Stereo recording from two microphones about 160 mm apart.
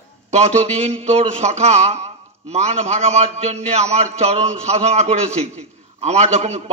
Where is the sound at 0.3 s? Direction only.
45° right (ahead or behind).